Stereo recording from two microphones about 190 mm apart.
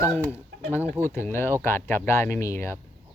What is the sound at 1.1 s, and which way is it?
Speech, 15° left (ahead or behind).